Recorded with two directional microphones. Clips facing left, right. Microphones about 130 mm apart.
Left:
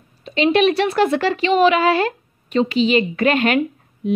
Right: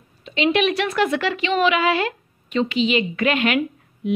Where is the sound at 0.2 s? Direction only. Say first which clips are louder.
Left 4 dB; 40° left (ahead or behind).